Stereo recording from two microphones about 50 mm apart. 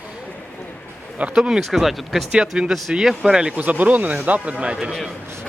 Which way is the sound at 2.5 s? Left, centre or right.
Right.